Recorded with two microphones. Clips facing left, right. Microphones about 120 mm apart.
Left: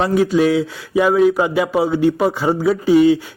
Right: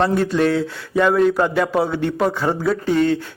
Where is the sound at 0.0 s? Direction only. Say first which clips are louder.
Left 2 dB; 5° left (ahead or behind).